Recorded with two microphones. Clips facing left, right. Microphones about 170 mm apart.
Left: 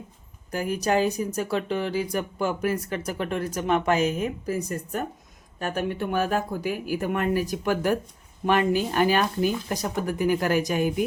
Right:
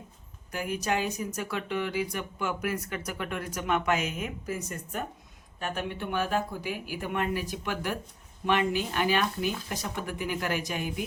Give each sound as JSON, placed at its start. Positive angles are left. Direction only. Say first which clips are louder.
{"t": 0.5, "sound": "speech", "louder": "left 6 dB", "side_deg": 35}